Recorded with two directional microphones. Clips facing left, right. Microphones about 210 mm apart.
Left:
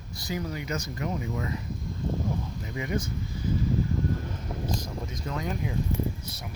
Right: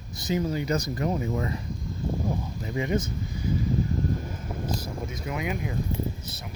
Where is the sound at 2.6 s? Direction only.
25° right (ahead or behind).